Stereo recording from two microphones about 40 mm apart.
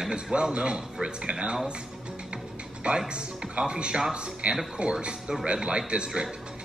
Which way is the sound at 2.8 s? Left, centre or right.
Right.